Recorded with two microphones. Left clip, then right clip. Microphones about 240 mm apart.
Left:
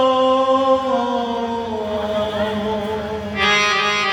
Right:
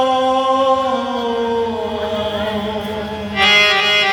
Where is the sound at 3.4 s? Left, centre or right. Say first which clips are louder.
Right 4 dB; right.